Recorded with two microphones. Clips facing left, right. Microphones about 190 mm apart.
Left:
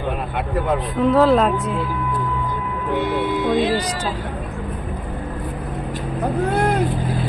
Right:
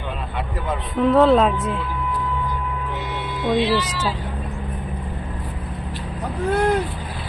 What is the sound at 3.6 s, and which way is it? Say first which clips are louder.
Speech: left 1 dB; 45° left (ahead or behind).